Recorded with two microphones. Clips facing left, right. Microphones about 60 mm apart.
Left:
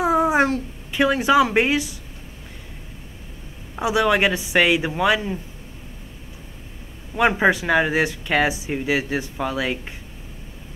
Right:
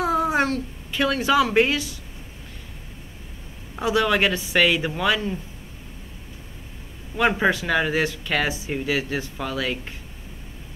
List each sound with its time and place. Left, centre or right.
0.0 s a child's voice: centre
3.7 s speech: centre
7.2 s speech: centre